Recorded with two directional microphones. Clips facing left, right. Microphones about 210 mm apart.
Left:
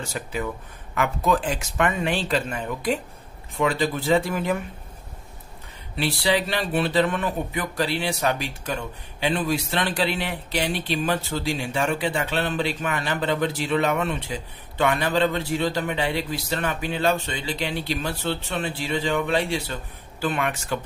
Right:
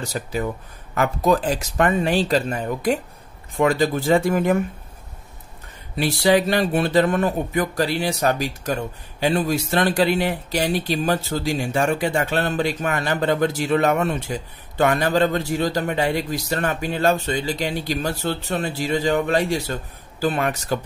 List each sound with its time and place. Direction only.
0.0 s a man's voice: 35° right (ahead or behind)
5.9 s a man's voice: 45° right (ahead or behind)